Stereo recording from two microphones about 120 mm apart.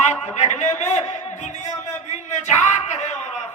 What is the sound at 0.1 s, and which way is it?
Music, 70° left (ahead or behind).